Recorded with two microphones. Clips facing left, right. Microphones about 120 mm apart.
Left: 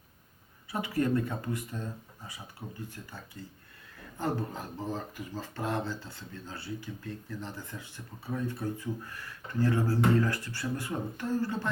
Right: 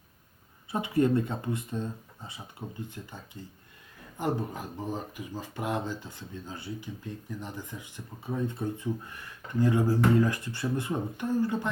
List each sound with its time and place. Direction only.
0.7 s speech: 25° right (ahead or behind)
4.2 s speech: 15° right (ahead or behind)